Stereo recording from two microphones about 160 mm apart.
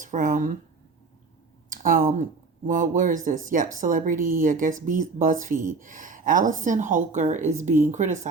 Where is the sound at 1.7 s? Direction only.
55° right (ahead or behind).